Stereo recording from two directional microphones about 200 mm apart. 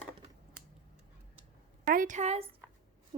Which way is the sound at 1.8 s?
40° right (ahead or behind).